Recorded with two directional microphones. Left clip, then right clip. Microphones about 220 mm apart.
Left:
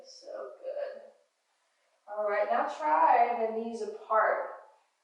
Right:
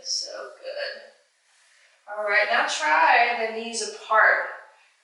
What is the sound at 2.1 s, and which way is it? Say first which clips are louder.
A woman's voice: right 7 dB; 15° left (ahead or behind).